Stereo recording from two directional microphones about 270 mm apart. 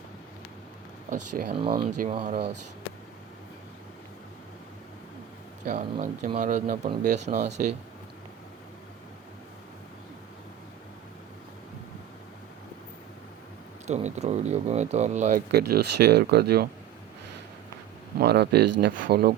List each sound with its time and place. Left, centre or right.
1.5 s speech: centre
5.6 s speech: right
13.8 s speech: right
18.2 s speech: right